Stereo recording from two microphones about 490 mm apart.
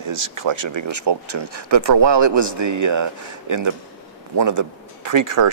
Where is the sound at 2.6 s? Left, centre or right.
Right.